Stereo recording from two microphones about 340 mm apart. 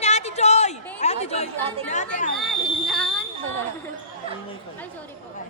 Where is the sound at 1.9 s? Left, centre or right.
Left.